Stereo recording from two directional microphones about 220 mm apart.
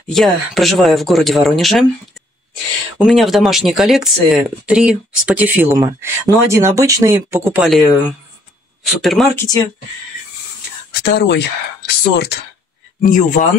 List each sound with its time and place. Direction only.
0.1 s speech: centre (ahead or behind)
3.0 s speech: centre (ahead or behind)
8.8 s speech: centre (ahead or behind)
9.3 s speech: 15° left (ahead or behind)
10.9 s speech: 50° left (ahead or behind)
13.0 s speech: 35° left (ahead or behind)